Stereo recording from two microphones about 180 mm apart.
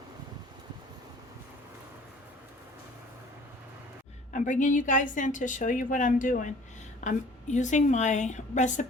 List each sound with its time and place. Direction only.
4.3 s a woman's voice: 45° left (ahead or behind)